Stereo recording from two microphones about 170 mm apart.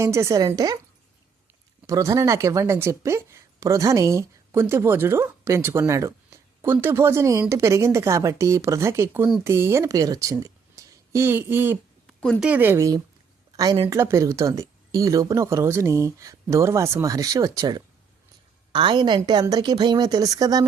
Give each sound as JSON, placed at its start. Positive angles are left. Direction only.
{"t": 0.0, "sound": "a woman's voice", "side_deg": -15}
{"t": 1.9, "sound": "a woman's voice", "side_deg": -20}
{"t": 12.2, "sound": "speech", "side_deg": 5}
{"t": 12.5, "sound": "speech", "side_deg": -10}
{"t": 13.6, "sound": "a woman's voice", "side_deg": -30}
{"t": 13.9, "sound": "a woman's voice", "side_deg": -15}